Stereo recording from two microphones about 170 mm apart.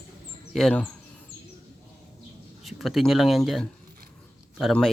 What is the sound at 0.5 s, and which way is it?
Speech, 5° left (ahead or behind).